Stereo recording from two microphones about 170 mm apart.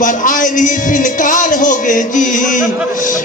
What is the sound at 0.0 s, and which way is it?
Music, 50° left (ahead or behind).